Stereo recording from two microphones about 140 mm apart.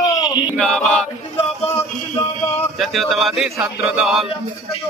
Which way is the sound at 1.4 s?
45° left (ahead or behind).